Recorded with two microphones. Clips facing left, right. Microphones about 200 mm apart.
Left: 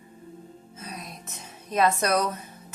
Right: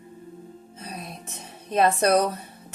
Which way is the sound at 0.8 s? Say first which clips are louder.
Right 2 dB; 30° right (ahead or behind).